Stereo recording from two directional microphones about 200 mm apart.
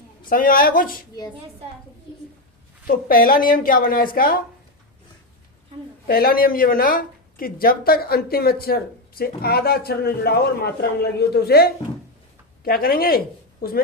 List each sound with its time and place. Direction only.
0.3 s speech: 45° left (ahead or behind)
2.8 s speech: 45° left (ahead or behind)
6.1 s speech: 50° left (ahead or behind)